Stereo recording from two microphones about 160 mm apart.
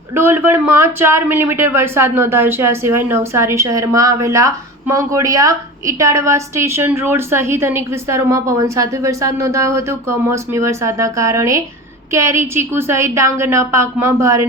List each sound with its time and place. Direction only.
0.1 s a man's voice: 15° right (ahead or behind)